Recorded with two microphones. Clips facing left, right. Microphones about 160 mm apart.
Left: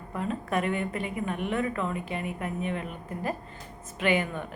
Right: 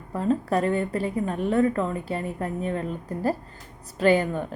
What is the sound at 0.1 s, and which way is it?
Speech, 35° right (ahead or behind).